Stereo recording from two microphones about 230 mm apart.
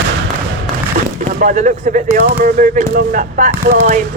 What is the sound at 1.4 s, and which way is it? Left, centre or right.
Speech, right.